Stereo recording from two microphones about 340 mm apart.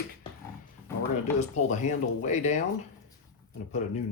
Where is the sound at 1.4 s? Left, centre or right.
Left.